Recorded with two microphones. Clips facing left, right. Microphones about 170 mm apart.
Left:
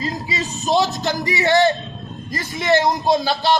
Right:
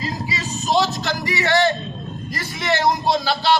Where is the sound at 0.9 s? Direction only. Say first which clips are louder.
Left 2 dB; 20° left (ahead or behind).